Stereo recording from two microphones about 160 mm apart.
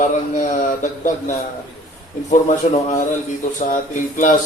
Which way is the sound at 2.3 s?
50° left (ahead or behind).